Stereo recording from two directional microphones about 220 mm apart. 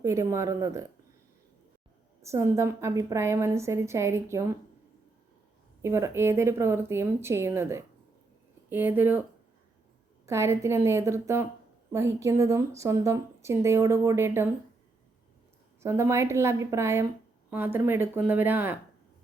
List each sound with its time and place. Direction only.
0.0 s a woman's voice: 15° right (ahead or behind)
2.2 s a woman's voice: 15° right (ahead or behind)
5.8 s a woman's voice: 10° right (ahead or behind)
10.2 s a woman's voice: 10° right (ahead or behind)
15.8 s a woman's voice: 10° right (ahead or behind)